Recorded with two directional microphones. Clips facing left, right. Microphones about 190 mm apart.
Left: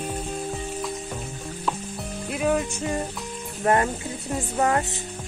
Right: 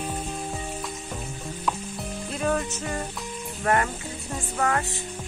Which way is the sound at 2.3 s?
10° left (ahead or behind).